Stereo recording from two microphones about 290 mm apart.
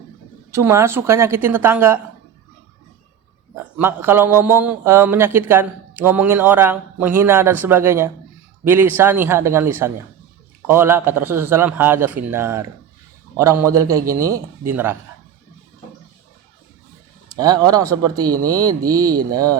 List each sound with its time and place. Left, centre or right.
0.5 s a man's voice: centre
3.8 s a man's voice: centre
17.2 s a sound: centre
18.4 s a man's voice: centre
18.7 s speech: right
19.3 s a man's voice: centre